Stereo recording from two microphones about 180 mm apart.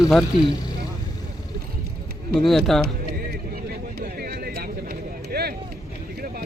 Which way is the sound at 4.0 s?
55° right (ahead or behind).